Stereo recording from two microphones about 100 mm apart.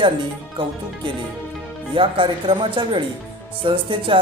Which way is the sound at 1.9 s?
60° right (ahead or behind).